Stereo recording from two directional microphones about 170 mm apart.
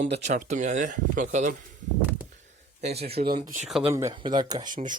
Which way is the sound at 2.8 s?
40° right (ahead or behind).